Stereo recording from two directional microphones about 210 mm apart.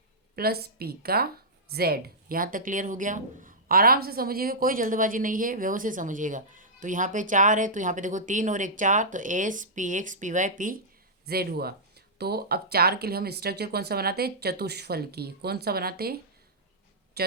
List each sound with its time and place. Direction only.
0.3 s speech: 50° right (ahead or behind)
11.3 s speech: 50° right (ahead or behind)
17.2 s speech: 50° right (ahead or behind)